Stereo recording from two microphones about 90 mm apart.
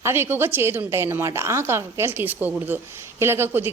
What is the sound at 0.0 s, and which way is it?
A woman's voice, 25° right (ahead or behind).